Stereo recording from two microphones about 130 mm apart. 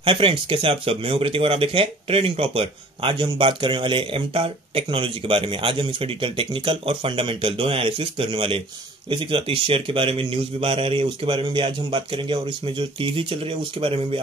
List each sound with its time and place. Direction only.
0.0 s speech: 40° right (ahead or behind)